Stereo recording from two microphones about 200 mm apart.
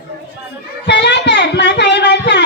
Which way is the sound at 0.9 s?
60° left (ahead or behind).